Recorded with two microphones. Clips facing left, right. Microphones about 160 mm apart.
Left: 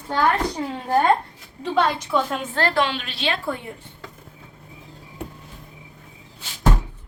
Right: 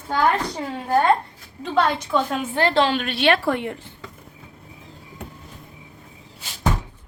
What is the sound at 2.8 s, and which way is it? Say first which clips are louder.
Speech: right 4 dB; 45° right (ahead or behind).